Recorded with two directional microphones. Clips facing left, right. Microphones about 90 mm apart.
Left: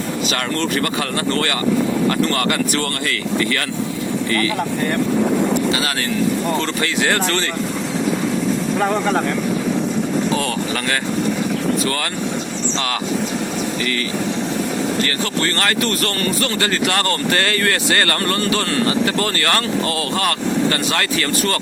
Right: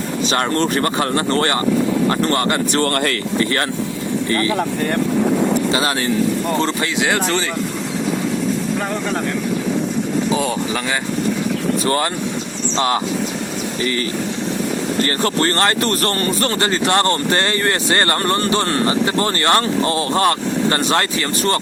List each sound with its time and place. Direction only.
0.3 s speech: 35° right (ahead or behind)
5.7 s speech: 30° right (ahead or behind)
6.6 s speech: 15° right (ahead or behind)
10.3 s speech: 10° right (ahead or behind)
12.7 s speech: 25° right (ahead or behind)
15.0 s speech: 35° right (ahead or behind)